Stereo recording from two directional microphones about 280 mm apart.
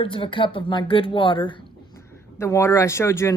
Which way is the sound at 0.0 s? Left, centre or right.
Centre.